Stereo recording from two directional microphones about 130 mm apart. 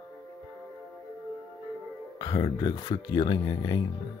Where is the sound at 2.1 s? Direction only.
35° left (ahead or behind).